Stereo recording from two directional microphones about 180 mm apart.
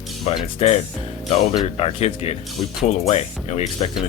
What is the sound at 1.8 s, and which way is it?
Speech, 35° left (ahead or behind).